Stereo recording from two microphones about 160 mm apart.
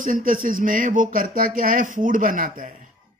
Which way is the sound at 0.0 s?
60° right (ahead or behind).